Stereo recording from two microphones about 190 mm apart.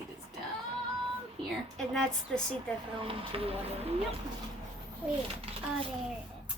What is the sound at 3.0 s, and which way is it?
Speech, 30° right (ahead or behind).